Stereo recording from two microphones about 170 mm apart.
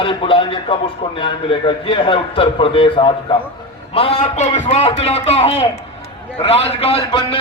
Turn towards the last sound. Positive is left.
turn(degrees=35)  # may be behind; listen again after turning